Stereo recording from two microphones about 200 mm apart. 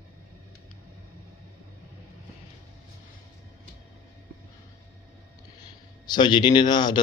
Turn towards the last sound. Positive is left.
turn(degrees=20)  # may be behind; listen again after turning